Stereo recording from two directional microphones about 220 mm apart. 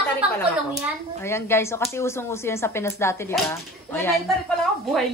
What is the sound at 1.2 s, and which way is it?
A woman's voice, 10° left (ahead or behind).